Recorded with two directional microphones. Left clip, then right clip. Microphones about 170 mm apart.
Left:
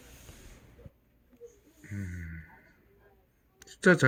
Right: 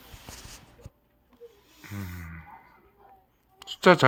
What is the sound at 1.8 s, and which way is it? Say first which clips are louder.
Music: right 3 dB; 70° right (ahead or behind).